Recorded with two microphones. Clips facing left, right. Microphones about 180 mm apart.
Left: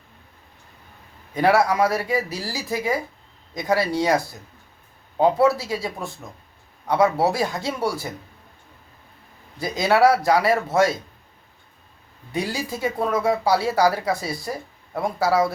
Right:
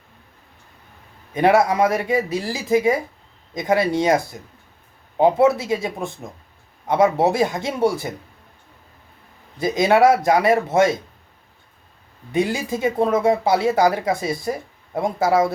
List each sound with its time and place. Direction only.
1.3 s speech: 20° right (ahead or behind)
9.6 s speech: 20° right (ahead or behind)
12.3 s speech: 20° right (ahead or behind)